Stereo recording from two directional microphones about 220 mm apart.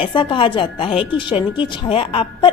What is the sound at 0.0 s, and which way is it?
A woman's voice, 20° left (ahead or behind).